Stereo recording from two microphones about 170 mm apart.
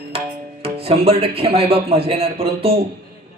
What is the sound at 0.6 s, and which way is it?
Speech, 35° right (ahead or behind).